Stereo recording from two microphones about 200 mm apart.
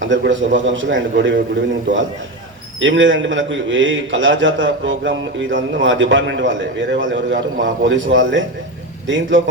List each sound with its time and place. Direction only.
0.0 s a man's voice: 70° right (ahead or behind)
2.8 s a man's voice: 65° right (ahead or behind)